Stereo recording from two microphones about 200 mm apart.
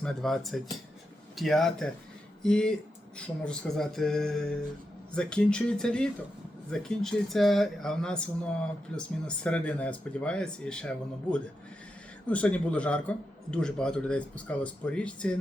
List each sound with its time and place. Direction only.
0.0 s a man's voice: centre (ahead or behind)